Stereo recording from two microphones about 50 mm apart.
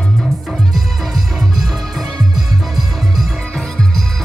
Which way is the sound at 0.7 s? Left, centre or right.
Centre.